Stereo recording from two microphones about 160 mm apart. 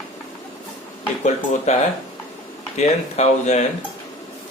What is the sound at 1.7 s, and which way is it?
Speech, 45° left (ahead or behind).